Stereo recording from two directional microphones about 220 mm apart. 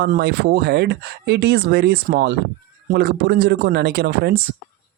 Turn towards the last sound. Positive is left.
turn(degrees=-45)  # may be behind; listen again after turning